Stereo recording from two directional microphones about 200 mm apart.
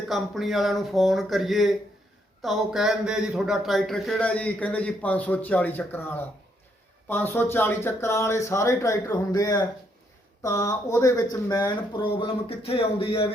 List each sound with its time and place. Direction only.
0.1 s a man's voice: centre (ahead or behind); by 13.3 s 30° left (ahead or behind)